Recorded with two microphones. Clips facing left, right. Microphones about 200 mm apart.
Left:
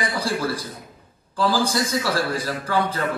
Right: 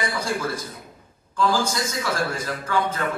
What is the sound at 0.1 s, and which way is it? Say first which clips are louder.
A man's voice: left 2 dB; 35° left (ahead or behind).